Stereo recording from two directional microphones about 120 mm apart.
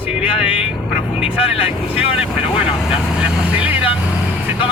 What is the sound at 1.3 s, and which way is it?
Speech, 55° left (ahead or behind).